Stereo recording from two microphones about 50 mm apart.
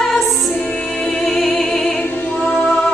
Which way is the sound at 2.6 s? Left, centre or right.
Left.